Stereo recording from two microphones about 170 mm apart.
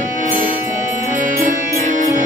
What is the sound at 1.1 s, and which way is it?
Music, 50° right (ahead or behind).